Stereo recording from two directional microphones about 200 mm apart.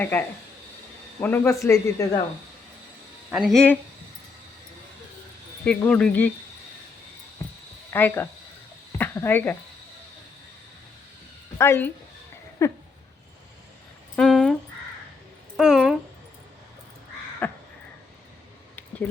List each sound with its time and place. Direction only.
0.0 s speech: 10° left (ahead or behind)
3.3 s speech: centre (ahead or behind)
5.6 s speech: 5° left (ahead or behind)
7.9 s speech: 10° left (ahead or behind)
11.5 s speech: 15° left (ahead or behind)
14.2 s a sound: centre (ahead or behind)
15.5 s a sound: 5° right (ahead or behind)
17.4 s crow: 10° left (ahead or behind)